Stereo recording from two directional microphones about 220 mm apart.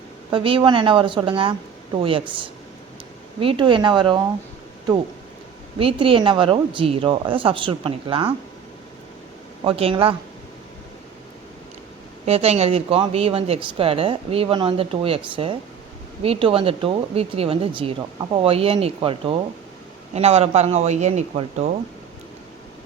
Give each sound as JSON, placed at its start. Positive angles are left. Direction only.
{"t": 0.3, "sound": "speech", "side_deg": -25}
{"t": 5.8, "sound": "speech", "side_deg": -25}
{"t": 9.6, "sound": "speech", "side_deg": -25}
{"t": 12.2, "sound": "speech", "side_deg": -30}